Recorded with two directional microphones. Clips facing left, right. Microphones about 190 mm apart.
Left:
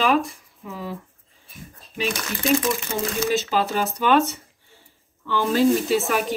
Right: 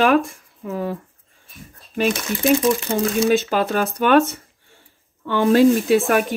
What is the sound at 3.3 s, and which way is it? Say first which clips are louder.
Speech: right 4 dB; 55° right (ahead or behind).